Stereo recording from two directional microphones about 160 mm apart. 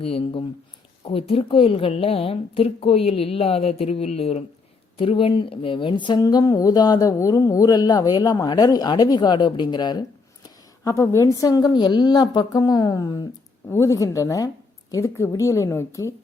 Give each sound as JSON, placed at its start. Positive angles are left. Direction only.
{"t": 0.0, "sound": "a woman's voice", "side_deg": 35}